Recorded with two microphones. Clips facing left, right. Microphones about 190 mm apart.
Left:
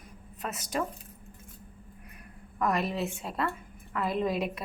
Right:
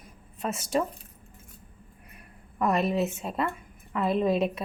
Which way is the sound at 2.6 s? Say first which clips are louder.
Right 4 dB; 25° right (ahead or behind).